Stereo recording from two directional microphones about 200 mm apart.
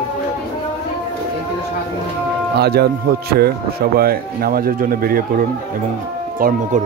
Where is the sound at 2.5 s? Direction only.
55° right (ahead or behind).